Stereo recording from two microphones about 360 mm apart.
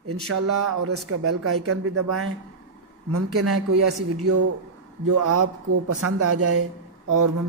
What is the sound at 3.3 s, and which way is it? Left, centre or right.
Speech, right.